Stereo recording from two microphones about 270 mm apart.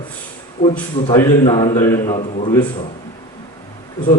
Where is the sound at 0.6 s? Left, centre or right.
Centre.